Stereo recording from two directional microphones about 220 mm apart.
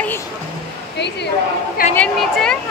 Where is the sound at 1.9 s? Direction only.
5° left (ahead or behind).